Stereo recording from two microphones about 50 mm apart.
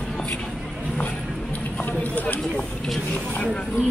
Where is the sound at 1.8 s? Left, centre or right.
Left.